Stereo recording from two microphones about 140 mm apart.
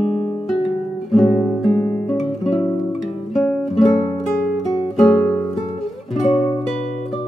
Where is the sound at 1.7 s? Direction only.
15° left (ahead or behind).